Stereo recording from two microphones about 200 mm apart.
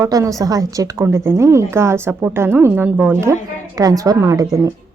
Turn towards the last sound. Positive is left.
turn(degrees=-15)  # may be behind; listen again after turning